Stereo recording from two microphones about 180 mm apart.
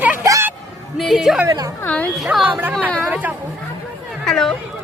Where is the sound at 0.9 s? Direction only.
Centre (ahead or behind).